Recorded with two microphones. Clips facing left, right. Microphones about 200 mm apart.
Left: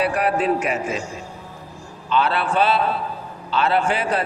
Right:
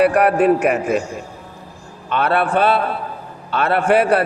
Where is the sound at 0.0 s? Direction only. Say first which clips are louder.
Right 7 dB; 60° right (ahead or behind).